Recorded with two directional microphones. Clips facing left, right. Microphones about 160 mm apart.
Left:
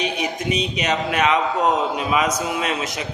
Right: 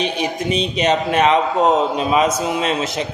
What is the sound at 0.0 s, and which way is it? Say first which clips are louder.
A man's voice: right 3 dB; 30° right (ahead or behind).